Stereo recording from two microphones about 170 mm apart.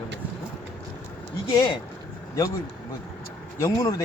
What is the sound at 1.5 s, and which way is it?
Speech, 25° left (ahead or behind).